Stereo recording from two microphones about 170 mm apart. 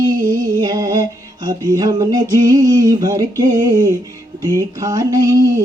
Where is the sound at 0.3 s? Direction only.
25° right (ahead or behind).